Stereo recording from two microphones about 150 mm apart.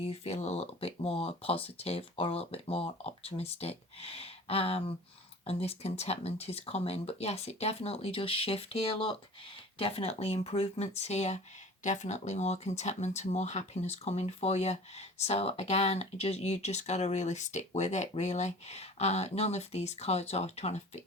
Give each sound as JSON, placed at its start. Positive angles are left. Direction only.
{"t": 0.1, "sound": "speech", "side_deg": 45}